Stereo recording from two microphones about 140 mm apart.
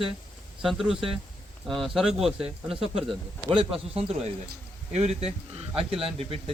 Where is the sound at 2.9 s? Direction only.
40° right (ahead or behind).